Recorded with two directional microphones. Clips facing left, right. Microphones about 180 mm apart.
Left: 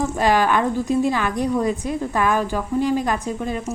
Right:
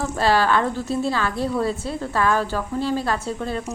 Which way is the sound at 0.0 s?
15° left (ahead or behind).